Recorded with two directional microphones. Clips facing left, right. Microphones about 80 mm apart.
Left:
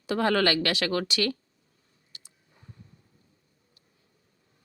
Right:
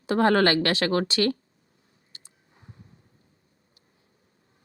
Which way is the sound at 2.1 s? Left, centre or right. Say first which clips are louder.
Right 1 dB; right.